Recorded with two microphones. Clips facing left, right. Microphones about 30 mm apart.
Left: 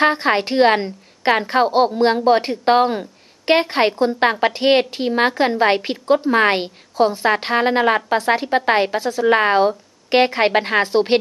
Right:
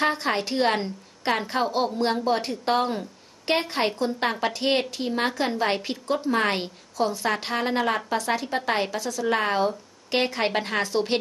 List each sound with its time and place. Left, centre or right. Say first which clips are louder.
0.0 s a woman's voice: left 8 dB; left